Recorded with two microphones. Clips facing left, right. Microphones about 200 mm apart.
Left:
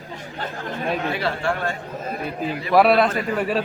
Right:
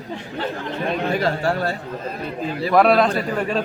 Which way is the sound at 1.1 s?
40° right (ahead or behind).